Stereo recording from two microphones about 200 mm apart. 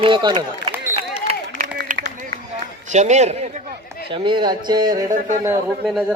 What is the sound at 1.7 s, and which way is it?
Run, 50° right (ahead or behind).